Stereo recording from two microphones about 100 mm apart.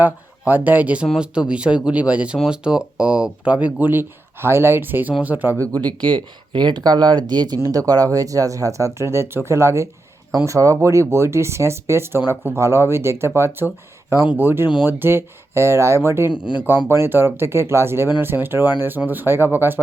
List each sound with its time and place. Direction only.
0.0 s speech: 15° right (ahead or behind)
5.5 s speech: 45° right (ahead or behind); by 19.8 s 20° right (ahead or behind)